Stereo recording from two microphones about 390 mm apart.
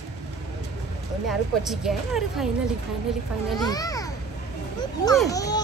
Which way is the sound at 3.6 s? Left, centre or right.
Centre.